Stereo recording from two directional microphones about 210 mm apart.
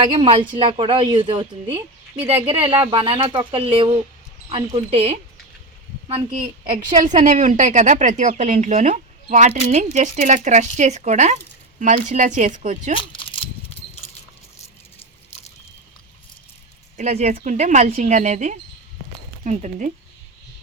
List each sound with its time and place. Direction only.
0.0 s a woman's voice: 25° right (ahead or behind)
13.0 s a sound: 25° left (ahead or behind)
17.0 s a woman's voice: 30° right (ahead or behind)